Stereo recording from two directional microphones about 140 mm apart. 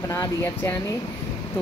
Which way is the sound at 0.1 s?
20° left (ahead or behind).